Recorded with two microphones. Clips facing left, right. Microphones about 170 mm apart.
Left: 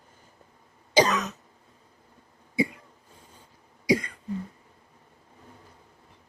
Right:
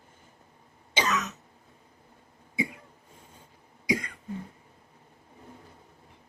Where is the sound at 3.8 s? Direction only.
35° left (ahead or behind).